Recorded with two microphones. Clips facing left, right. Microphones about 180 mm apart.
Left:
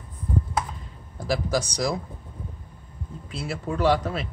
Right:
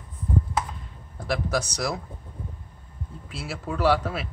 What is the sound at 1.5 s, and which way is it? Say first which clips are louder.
Speech: left 2 dB; 5° right (ahead or behind).